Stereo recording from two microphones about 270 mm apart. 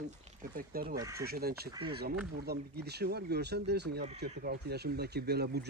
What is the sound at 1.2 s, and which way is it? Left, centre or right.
Speech, right.